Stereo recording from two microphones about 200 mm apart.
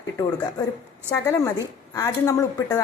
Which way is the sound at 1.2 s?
15° left (ahead or behind).